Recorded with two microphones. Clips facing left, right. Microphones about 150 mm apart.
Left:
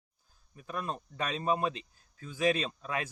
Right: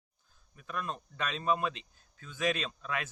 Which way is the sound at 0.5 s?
30° left (ahead or behind).